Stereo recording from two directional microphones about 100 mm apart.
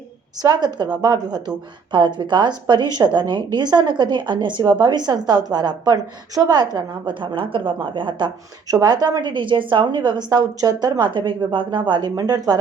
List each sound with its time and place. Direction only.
0.4 s a woman's voice: 45° right (ahead or behind)
8.6 s a woman's voice: 40° right (ahead or behind)